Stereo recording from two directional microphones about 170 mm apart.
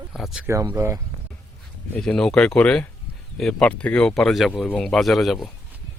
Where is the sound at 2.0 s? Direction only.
5° left (ahead or behind).